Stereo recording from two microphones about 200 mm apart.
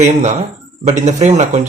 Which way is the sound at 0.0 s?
35° right (ahead or behind).